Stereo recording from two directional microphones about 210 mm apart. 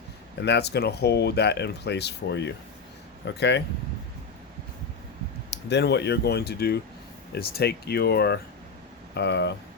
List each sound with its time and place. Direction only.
0.4 s speech: 55° left (ahead or behind)
5.5 s speech: 55° left (ahead or behind)